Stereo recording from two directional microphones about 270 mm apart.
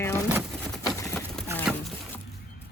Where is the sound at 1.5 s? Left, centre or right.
Centre.